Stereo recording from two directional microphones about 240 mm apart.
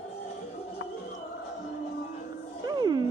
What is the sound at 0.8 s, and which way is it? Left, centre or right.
Music, left.